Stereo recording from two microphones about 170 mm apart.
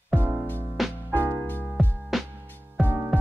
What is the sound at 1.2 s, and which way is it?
Music, 20° right (ahead or behind).